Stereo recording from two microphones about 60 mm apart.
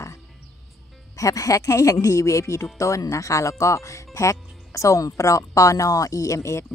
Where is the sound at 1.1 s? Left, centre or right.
Left.